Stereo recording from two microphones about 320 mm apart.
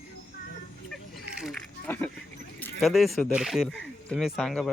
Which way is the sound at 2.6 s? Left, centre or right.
Centre.